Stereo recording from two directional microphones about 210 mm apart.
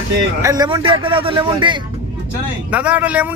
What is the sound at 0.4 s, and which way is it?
A man's voice, 20° right (ahead or behind).